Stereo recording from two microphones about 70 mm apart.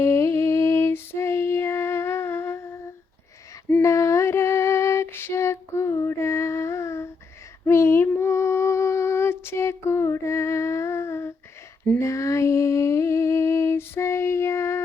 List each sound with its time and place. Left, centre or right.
0.0 s female singing: left
7.6 s humming: left
11.9 s a sound: left